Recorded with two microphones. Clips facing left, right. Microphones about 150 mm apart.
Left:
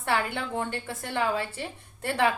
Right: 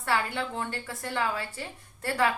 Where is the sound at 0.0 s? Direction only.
20° left (ahead or behind).